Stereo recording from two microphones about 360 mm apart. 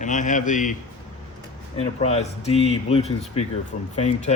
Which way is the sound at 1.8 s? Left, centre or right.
Centre.